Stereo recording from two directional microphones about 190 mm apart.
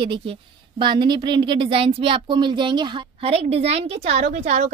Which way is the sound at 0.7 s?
25° right (ahead or behind).